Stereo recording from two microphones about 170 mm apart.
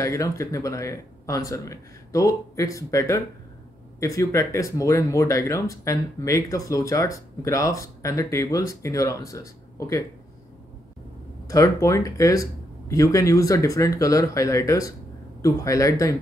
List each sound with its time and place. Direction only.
0.0 s speech: 20° left (ahead or behind)
11.4 s speech: 20° left (ahead or behind)